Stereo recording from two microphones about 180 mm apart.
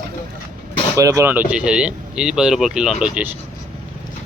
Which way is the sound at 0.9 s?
20° right (ahead or behind).